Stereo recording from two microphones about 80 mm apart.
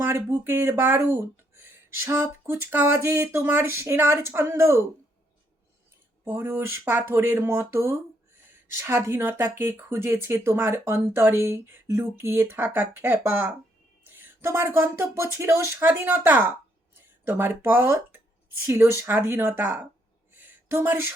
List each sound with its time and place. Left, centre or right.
0.0 s speech: right
6.2 s speech: right
20.3 s a sound: right